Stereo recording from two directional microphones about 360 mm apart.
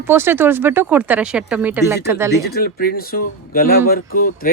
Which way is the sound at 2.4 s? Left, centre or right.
Left.